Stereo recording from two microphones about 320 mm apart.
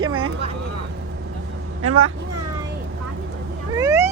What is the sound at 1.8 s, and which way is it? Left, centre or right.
Speech, right.